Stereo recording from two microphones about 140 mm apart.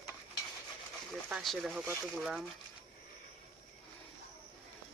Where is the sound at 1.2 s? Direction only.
Centre (ahead or behind).